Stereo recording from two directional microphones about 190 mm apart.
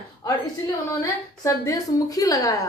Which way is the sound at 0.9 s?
15° left (ahead or behind).